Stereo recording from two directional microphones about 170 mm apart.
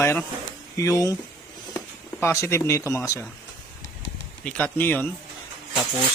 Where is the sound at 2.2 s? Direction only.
15° left (ahead or behind).